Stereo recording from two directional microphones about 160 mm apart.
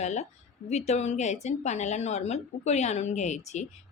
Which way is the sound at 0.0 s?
45° left (ahead or behind).